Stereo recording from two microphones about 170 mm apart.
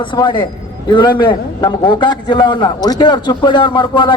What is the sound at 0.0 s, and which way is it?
A man's voice, 30° left (ahead or behind).